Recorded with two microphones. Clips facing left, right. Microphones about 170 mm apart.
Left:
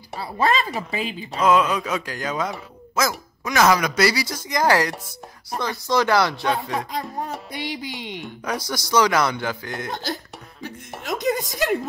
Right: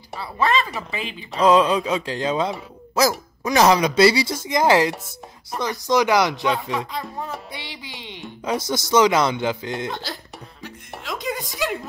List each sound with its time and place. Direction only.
0.2 s speech: 40° left (ahead or behind)
1.4 s speech: 30° right (ahead or behind)
6.9 s music: 40° left (ahead or behind)
8.5 s speech: 25° right (ahead or behind)
9.8 s speech: 45° left (ahead or behind)
10.6 s music: 45° left (ahead or behind)
11.5 s speech: 45° left (ahead or behind)